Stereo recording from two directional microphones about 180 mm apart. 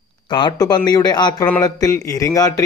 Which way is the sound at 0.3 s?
25° left (ahead or behind).